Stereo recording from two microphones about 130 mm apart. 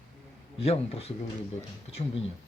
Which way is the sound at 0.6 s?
50° left (ahead or behind).